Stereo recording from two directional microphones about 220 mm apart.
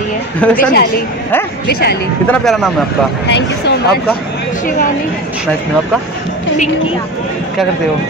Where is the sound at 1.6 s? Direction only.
45° left (ahead or behind).